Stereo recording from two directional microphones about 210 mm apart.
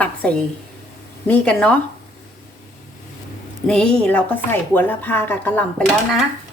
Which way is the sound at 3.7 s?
5° left (ahead or behind).